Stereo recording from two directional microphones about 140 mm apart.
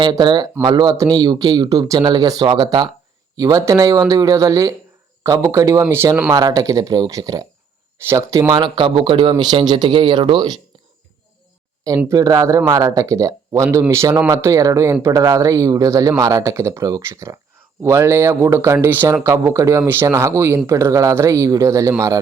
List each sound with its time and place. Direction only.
0.0 s speech: 35° right (ahead or behind); by 6.3 s 15° right (ahead or behind)
6.3 s speech: 25° right (ahead or behind)
8.4 s speech: 30° right (ahead or behind)
12.0 s speech: 25° right (ahead or behind)